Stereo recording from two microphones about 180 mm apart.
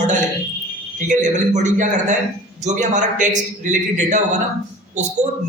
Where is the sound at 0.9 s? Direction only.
45° right (ahead or behind).